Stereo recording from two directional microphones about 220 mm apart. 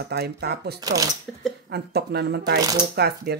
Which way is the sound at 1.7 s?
45° right (ahead or behind).